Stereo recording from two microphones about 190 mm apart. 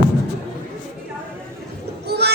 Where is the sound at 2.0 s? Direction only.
60° right (ahead or behind).